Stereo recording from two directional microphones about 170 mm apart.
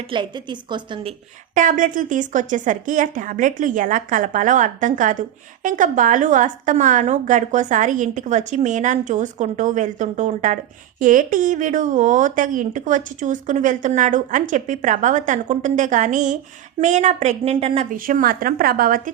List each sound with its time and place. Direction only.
0.1 s a woman's voice: 25° right (ahead or behind)
1.5 s speech: 50° right (ahead or behind)
17.9 s a woman's voice: 55° right (ahead or behind)